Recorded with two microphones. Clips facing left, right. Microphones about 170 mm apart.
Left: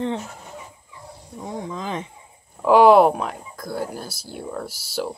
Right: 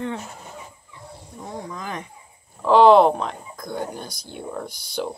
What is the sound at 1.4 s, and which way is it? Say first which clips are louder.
Speech: left 3 dB; 20° left (ahead or behind).